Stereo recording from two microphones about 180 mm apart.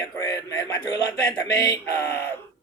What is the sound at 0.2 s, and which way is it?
Speech, 15° left (ahead or behind).